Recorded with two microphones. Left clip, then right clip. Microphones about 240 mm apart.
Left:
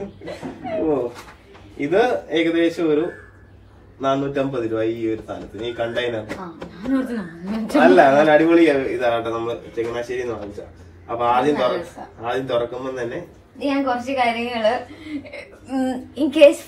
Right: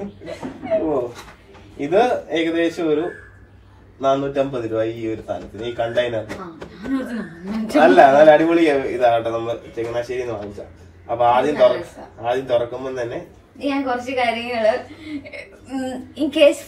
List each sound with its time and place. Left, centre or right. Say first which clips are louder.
1.8 s a man's voice: right 1 dB; centre
6.9 s speech: left 2 dB; centre
7.8 s a man's voice: right 3 dB; centre
13.6 s speech: left 1 dB; centre